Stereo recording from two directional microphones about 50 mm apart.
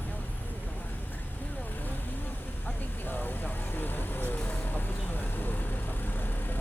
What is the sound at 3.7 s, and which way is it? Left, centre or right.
Vehicle, left.